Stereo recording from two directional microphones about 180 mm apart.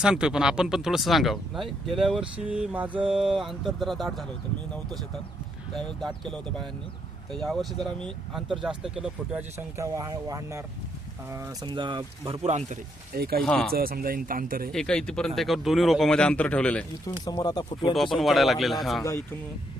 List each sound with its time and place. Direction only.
0.0 s speech: 5° right (ahead or behind)
5.7 s speech: 5° left (ahead or behind); by 11.5 s 15° right (ahead or behind)
11.6 s speech: 25° right (ahead or behind)
13.1 s speech: 60° right (ahead or behind)
13.4 s speech: centre (ahead or behind)
13.7 s speech: 55° right (ahead or behind)
14.7 s speech: 5° left (ahead or behind)
17.1 s speech: 20° left (ahead or behind)
17.9 s speech: centre (ahead or behind)